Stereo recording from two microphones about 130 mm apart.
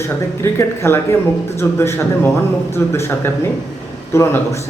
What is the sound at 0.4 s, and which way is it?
A man's voice, 20° left (ahead or behind).